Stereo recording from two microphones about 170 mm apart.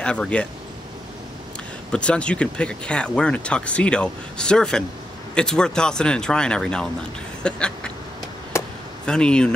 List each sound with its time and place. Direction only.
0.0 s speech: 5° left (ahead or behind)
1.9 s speech: 5° left (ahead or behind)
8.5 s chop: 15° left (ahead or behind)
9.0 s speech: 5° left (ahead or behind)